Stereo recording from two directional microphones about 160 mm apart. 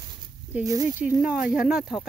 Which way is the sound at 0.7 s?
20° right (ahead or behind).